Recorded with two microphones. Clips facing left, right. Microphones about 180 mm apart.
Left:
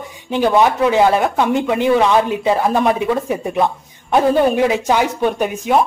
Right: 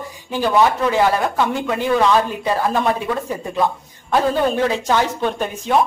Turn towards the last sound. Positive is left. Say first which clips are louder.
# left 4 dB
turn(degrees=10)  # may be behind; listen again after turning